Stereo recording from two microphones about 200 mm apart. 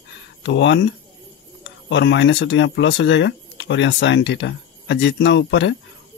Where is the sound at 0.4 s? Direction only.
65° left (ahead or behind).